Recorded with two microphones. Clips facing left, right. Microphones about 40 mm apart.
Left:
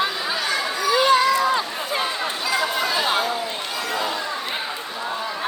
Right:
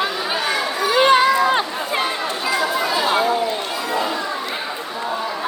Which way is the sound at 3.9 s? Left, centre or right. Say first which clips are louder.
Right 4 dB; right.